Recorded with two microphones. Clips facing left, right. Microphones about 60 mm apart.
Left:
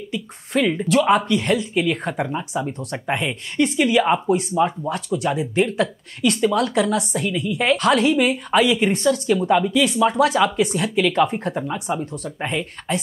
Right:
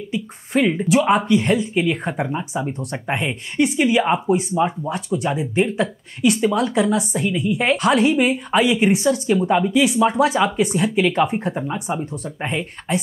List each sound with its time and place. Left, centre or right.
0.1 s a woman's voice: centre